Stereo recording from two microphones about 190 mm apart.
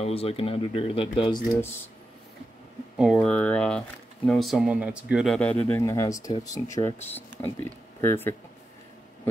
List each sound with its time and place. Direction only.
0.0 s speech: 30° left (ahead or behind)
3.0 s speech: centre (ahead or behind)